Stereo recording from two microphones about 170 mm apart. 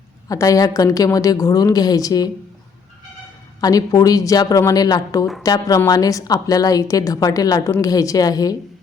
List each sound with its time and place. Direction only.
0.3 s a woman's voice: 20° left (ahead or behind)
3.6 s a woman's voice: 20° left (ahead or behind)